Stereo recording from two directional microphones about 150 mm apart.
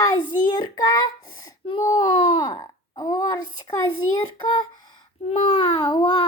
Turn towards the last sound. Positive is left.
turn(degrees=35)  # may be behind; listen again after turning